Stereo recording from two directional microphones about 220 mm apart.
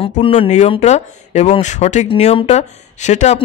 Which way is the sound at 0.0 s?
30° left (ahead or behind).